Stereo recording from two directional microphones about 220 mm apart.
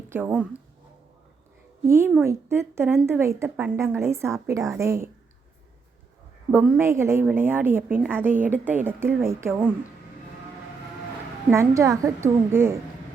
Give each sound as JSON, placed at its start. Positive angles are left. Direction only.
{"t": 0.1, "sound": "a woman's voice", "side_deg": -5}
{"t": 1.9, "sound": "a woman's voice", "side_deg": -10}
{"t": 6.5, "sound": "a woman's voice", "side_deg": -10}
{"t": 11.5, "sound": "a woman's voice", "side_deg": -15}